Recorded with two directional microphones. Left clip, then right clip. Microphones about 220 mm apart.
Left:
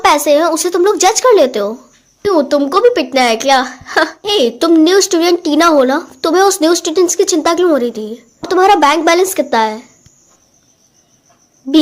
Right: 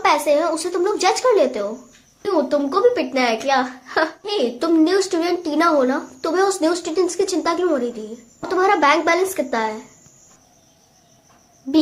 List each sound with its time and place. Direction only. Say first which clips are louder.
0.0 s a woman's voice: left 7 dB; 40° left (ahead or behind)
11.6 s speech: left 7 dB; 45° left (ahead or behind)